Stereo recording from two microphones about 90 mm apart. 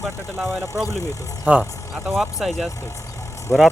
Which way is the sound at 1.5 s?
15° right (ahead or behind).